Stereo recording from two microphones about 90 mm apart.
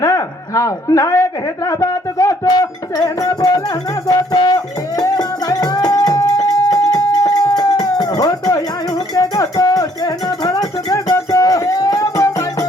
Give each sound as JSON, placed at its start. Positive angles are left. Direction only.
{"t": 0.0, "sound": "a man's voice", "side_deg": 35}
{"t": 4.0, "sound": "music", "side_deg": 45}